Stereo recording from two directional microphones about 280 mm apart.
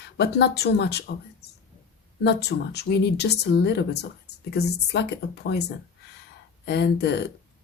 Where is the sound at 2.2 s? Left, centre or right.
Left.